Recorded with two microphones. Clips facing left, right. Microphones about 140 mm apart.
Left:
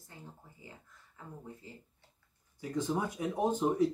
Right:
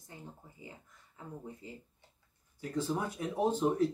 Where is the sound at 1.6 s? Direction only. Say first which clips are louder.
Right 3 dB; 20° right (ahead or behind).